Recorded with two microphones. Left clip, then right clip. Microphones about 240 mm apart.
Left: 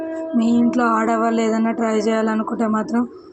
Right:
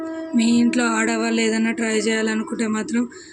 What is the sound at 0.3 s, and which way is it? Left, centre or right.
A woman's voice, centre.